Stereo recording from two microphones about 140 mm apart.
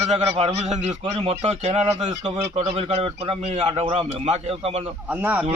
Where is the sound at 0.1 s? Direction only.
50° right (ahead or behind).